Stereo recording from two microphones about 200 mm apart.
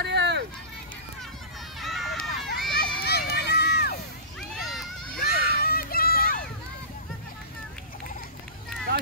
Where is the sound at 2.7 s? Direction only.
55° left (ahead or behind).